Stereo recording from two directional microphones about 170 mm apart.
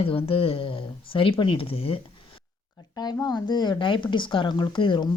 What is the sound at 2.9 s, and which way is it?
Speech, 20° left (ahead or behind).